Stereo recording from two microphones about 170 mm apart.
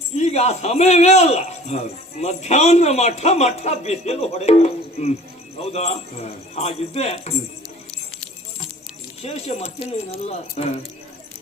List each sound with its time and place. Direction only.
0.2 s speech: 40° left (ahead or behind)
9.2 s speech: 40° left (ahead or behind)